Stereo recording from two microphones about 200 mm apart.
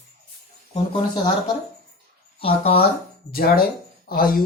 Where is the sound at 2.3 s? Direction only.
30° left (ahead or behind).